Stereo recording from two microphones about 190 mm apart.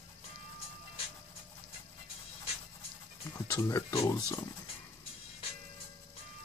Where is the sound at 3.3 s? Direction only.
15° left (ahead or behind).